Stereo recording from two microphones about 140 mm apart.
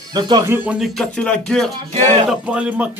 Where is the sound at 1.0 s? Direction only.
5° left (ahead or behind).